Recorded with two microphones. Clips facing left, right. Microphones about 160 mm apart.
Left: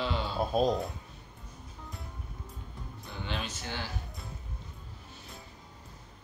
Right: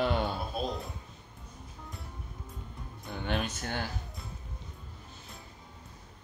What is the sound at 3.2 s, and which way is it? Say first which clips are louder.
Speech: right 4 dB; 55° right (ahead or behind).